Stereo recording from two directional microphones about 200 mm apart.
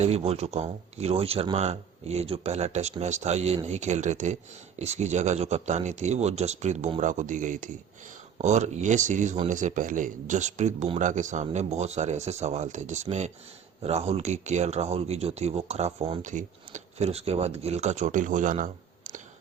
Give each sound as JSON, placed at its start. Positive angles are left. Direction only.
{"t": 0.0, "sound": "speech", "side_deg": -30}